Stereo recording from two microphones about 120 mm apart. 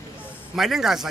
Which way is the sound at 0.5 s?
5° right (ahead or behind).